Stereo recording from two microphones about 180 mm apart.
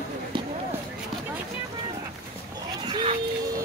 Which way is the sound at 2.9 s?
30° right (ahead or behind).